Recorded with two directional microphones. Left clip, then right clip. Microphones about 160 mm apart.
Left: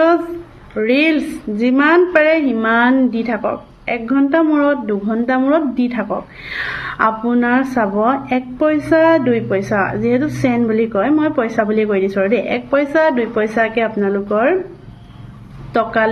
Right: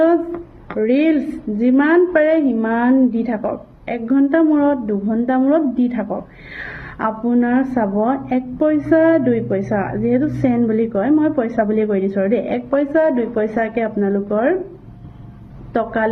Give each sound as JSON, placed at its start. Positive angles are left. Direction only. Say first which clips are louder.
{"t": 0.8, "sound": "a woman's voice", "louder": "left 2 dB", "side_deg": 20}
{"t": 15.7, "sound": "a woman's voice", "louder": "left 4 dB", "side_deg": 15}